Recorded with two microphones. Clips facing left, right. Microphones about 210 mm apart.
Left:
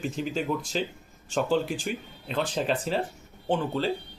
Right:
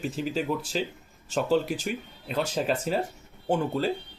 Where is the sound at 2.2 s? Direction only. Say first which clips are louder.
Right 1 dB; 5° right (ahead or behind).